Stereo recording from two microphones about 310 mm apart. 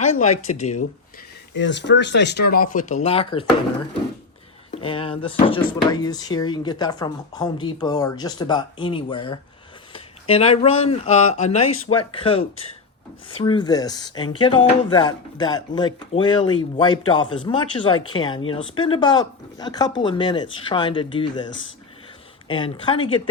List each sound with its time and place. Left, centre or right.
0.0 s speech: left
1.5 s speech: left; by 3.4 s centre
4.7 s speech: centre